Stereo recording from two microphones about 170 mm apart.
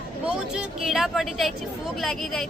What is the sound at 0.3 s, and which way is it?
Speech, 5° right (ahead or behind).